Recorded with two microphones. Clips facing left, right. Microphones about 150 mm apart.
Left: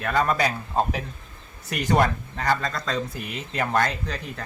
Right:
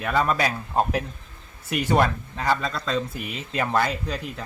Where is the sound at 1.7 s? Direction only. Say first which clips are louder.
Even; 5° right (ahead or behind).